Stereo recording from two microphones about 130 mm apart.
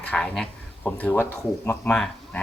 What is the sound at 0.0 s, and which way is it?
Speech, 10° left (ahead or behind).